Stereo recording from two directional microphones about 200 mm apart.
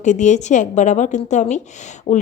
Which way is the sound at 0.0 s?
35° left (ahead or behind).